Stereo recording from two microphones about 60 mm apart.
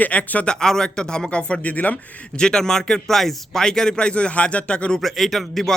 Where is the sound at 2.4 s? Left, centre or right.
Centre.